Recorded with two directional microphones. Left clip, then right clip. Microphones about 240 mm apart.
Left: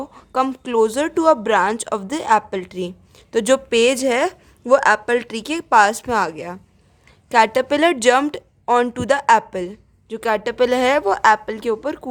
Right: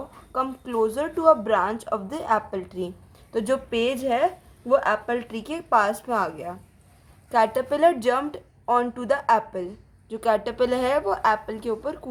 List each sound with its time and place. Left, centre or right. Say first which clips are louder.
0.3 s a woman's voice: left 7 dB; left